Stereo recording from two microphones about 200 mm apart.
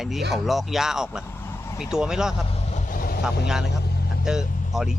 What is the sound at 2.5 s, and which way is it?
Vehicle, 30° left (ahead or behind).